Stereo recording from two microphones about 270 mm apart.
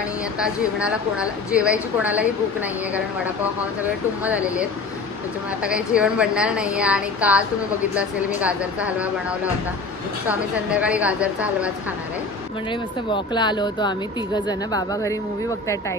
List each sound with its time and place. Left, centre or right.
1.5 s a woman's voice: centre
4.2 s a woman's voice: centre
8.9 s a woman's voice: centre
13.1 s speech: centre